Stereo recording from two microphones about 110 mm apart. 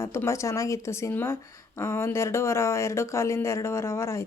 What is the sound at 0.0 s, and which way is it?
A woman's voice, 25° left (ahead or behind).